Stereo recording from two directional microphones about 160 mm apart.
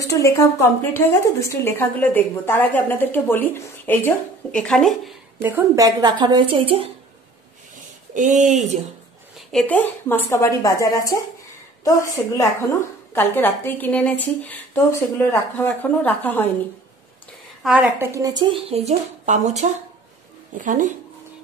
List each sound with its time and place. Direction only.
0.0 s a woman's voice: 20° left (ahead or behind); by 5.1 s 5° left (ahead or behind)
5.4 s a woman's voice: 20° right (ahead or behind); by 6.9 s 35° right (ahead or behind)
7.7 s a sound: 50° right (ahead or behind)
9.5 s a woman's voice: 5° left (ahead or behind)
17.6 s a woman's voice: 5° right (ahead or behind); by 20.9 s 55° right (ahead or behind)